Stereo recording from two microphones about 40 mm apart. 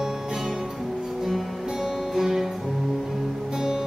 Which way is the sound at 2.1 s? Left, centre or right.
Centre.